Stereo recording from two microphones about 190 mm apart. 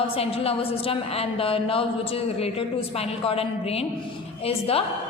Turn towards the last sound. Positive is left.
turn(degrees=30)  # may be behind; listen again after turning